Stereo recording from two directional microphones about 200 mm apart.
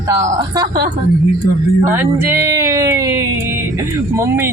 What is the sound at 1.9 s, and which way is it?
Speech, 10° right (ahead or behind).